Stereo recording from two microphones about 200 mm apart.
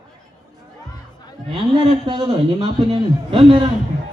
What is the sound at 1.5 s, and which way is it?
A man's voice, 25° right (ahead or behind).